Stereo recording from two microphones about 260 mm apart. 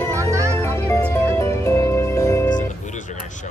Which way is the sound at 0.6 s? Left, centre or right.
Centre.